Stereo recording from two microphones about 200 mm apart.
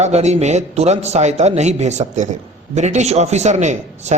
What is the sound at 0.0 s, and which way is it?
A man's voice, 35° right (ahead or behind).